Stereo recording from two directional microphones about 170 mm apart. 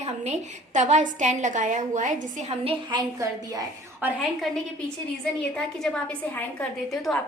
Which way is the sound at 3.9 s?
5° right (ahead or behind).